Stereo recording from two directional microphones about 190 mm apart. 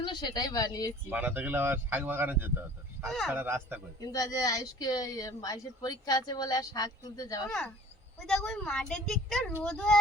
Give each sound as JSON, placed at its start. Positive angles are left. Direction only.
{"t": 0.0, "sound": "speech", "side_deg": 25}
{"t": 1.1, "sound": "speech", "side_deg": -10}
{"t": 3.0, "sound": "a woman's voice", "side_deg": 0}
{"t": 3.3, "sound": "speech", "side_deg": -10}
{"t": 4.0, "sound": "speech", "side_deg": 20}
{"t": 8.3, "sound": "a woman's voice", "side_deg": 0}